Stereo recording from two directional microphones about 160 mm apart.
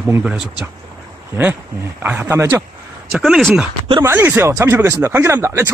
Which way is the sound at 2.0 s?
15° right (ahead or behind).